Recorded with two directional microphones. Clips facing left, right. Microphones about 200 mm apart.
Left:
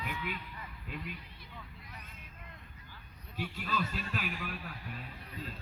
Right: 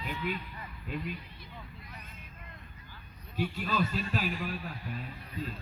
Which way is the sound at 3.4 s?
35° right (ahead or behind).